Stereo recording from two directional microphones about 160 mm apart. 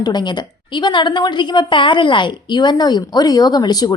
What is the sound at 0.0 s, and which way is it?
A woman's voice, 25° left (ahead or behind).